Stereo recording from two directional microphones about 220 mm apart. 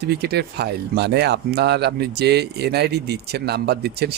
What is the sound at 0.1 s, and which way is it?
Speech, 45° right (ahead or behind).